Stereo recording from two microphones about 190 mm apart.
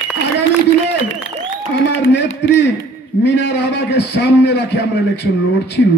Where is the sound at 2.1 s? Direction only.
65° left (ahead or behind).